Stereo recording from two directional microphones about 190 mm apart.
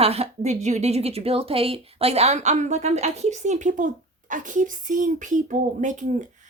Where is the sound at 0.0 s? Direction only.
35° right (ahead or behind).